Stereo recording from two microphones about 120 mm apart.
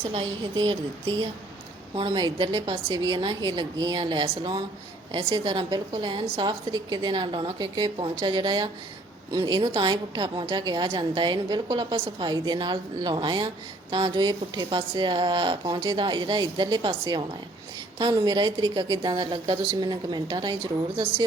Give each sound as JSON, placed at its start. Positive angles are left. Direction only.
{"t": 0.1, "sound": "a woman's voice", "side_deg": -45}
{"t": 2.0, "sound": "a woman's voice", "side_deg": -40}